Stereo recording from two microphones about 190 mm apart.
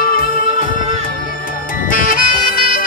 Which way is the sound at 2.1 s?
50° left (ahead or behind).